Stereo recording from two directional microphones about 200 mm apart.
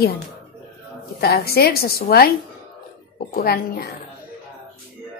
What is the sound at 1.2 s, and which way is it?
A woman's voice, 50° left (ahead or behind).